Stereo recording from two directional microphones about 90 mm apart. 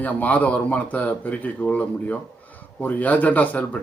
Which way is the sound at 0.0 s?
15° left (ahead or behind).